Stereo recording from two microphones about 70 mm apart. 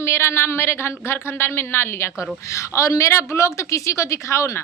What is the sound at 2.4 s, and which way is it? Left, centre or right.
A woman's voice, left.